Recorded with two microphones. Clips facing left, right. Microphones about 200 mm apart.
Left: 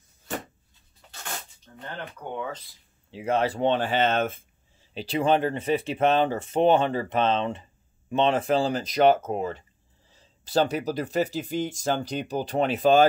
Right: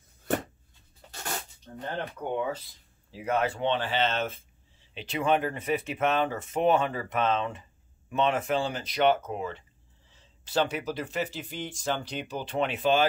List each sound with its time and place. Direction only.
3.1 s speech: 30° left (ahead or behind); by 4.8 s 50° left (ahead or behind)
4.9 s speech: 35° left (ahead or behind)